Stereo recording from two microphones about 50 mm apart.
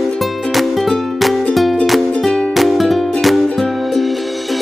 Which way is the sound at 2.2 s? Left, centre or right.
Centre.